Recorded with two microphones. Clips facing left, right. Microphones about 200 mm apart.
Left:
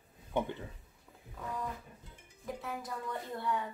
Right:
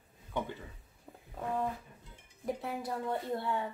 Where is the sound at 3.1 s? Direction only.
30° right (ahead or behind).